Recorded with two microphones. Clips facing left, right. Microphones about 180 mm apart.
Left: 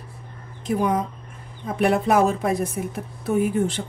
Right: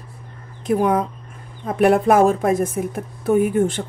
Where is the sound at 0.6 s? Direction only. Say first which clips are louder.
Right 4 dB; 55° right (ahead or behind).